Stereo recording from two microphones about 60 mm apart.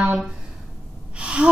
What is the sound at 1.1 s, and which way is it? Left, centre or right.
Gasp, centre.